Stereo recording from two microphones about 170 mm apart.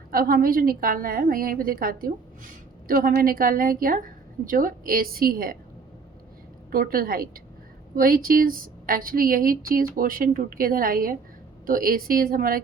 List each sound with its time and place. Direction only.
0.1 s a woman's voice: 60° right (ahead or behind)
6.7 s a woman's voice: 60° right (ahead or behind)